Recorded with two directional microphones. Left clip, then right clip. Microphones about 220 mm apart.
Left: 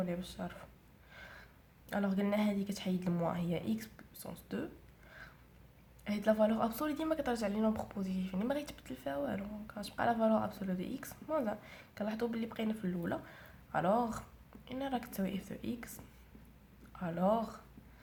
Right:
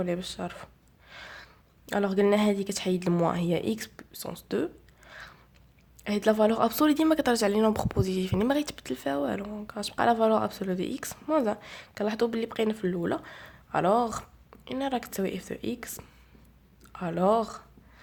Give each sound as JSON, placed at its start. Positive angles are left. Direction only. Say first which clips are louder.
{"t": 0.0, "sound": "speech", "louder": "right 9 dB", "side_deg": -40}
{"t": 1.1, "sound": "gasp", "louder": "right 9 dB", "side_deg": -40}
{"t": 1.9, "sound": "speech", "louder": "right 12 dB", "side_deg": -40}